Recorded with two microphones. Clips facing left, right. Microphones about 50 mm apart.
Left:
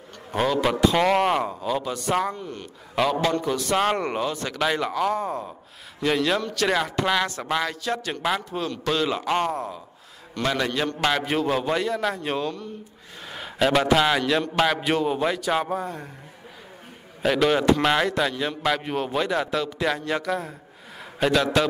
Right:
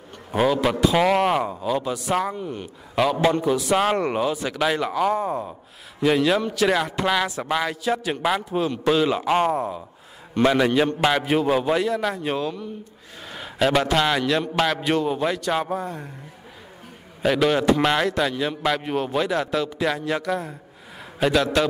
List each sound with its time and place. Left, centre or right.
0.3 s a man's voice: centre
3.4 s a man's voice: centre
17.2 s a man's voice: centre